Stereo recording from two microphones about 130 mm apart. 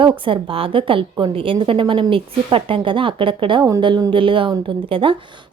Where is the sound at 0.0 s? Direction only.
40° right (ahead or behind).